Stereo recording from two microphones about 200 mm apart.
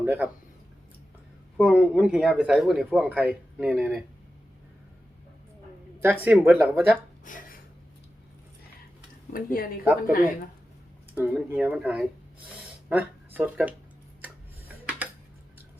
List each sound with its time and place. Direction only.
0.0 s speech: 10° right (ahead or behind)
1.5 s speech: centre (ahead or behind)
6.2 s speech: 10° right (ahead or behind)
7.3 s a sound: 40° left (ahead or behind)
9.3 s speech: 45° left (ahead or behind)
11.1 s speech: 10° right (ahead or behind)